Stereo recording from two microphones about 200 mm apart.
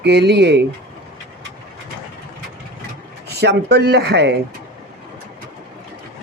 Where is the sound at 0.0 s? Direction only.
60° right (ahead or behind).